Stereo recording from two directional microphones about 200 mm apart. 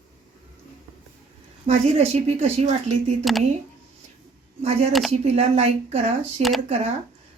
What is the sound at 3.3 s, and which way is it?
Speech, centre (ahead or behind).